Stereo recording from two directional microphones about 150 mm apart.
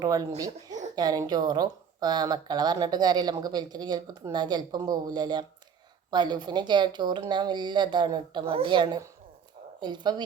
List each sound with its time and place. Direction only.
0.0 s speech: 25° right (ahead or behind)